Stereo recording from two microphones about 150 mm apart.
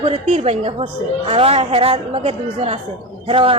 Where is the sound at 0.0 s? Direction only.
45° right (ahead or behind).